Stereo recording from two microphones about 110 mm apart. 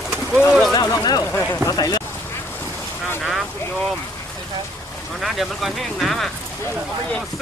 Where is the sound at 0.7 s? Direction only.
35° left (ahead or behind).